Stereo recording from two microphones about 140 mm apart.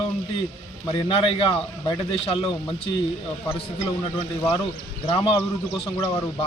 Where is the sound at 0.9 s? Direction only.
35° left (ahead or behind).